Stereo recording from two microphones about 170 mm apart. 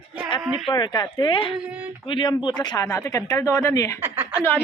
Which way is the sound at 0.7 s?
25° left (ahead or behind).